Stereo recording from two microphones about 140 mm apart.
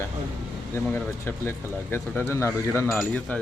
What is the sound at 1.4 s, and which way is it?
Speech, 15° left (ahead or behind).